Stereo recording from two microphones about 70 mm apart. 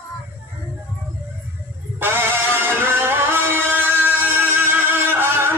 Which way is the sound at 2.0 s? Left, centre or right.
Right.